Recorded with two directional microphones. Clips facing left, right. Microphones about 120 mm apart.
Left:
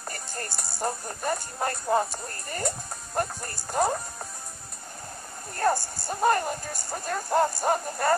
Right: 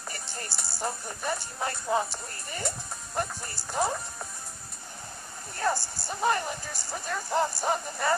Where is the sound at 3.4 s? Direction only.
50° left (ahead or behind).